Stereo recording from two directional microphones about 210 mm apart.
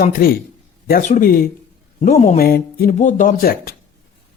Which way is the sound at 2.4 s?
45° left (ahead or behind).